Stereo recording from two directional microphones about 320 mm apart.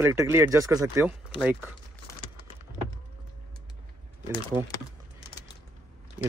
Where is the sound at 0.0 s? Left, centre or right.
Centre.